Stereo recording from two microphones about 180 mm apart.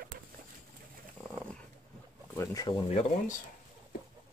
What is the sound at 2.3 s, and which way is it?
Speech, 20° left (ahead or behind).